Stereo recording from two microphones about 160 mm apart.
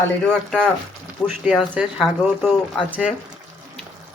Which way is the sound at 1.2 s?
5° right (ahead or behind).